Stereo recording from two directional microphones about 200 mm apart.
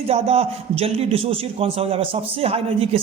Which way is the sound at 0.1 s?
30° right (ahead or behind).